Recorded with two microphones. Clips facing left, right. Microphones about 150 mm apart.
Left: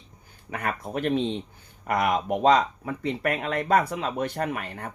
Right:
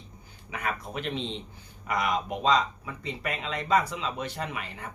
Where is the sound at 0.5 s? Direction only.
50° left (ahead or behind).